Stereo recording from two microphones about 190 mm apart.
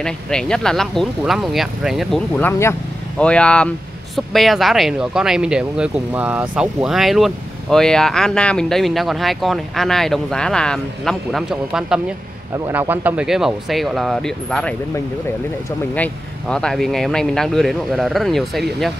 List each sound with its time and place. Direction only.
0.0 s speech: 5° left (ahead or behind)
2.3 s speech: 10° left (ahead or behind)
15.9 s speech: 5° left (ahead or behind)